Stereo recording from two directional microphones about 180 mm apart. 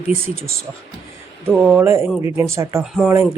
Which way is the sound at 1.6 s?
10° right (ahead or behind).